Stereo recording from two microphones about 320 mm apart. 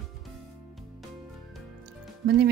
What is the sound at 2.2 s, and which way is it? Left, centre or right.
Speech, right.